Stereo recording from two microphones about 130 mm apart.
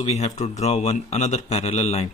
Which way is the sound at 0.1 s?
60° left (ahead or behind).